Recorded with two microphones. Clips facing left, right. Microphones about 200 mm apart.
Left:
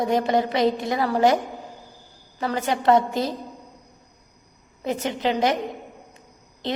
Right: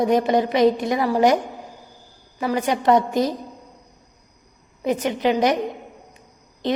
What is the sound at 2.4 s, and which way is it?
Speech, 15° right (ahead or behind).